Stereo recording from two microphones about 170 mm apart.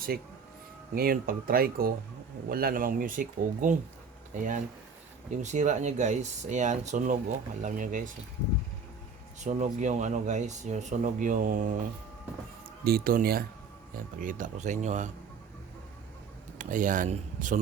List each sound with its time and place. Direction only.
0.9 s speech: 60° right (ahead or behind)
9.4 s speech: 45° right (ahead or behind)
12.8 s speech: 60° right (ahead or behind); by 15.1 s 45° right (ahead or behind)
16.6 s speech: 50° right (ahead or behind)